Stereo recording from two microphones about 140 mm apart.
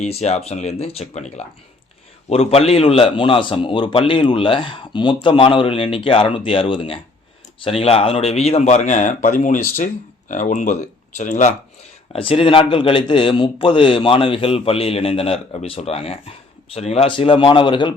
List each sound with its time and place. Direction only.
0.0 s speech: 50° left (ahead or behind)
12.1 s speech: 40° left (ahead or behind)